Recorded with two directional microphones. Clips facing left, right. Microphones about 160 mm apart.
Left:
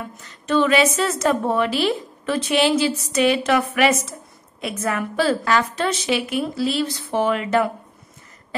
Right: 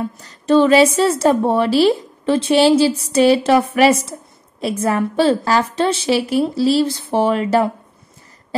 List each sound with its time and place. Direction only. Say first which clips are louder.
0.2 s a woman's voice: right 6 dB; 35° right (ahead or behind)